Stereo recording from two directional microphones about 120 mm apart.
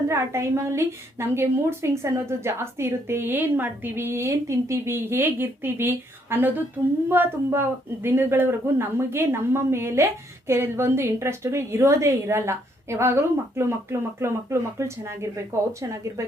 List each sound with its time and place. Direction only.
0.1 s a woman's voice: 25° right (ahead or behind)